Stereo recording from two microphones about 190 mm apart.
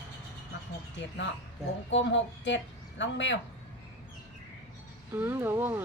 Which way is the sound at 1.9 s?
75° left (ahead or behind).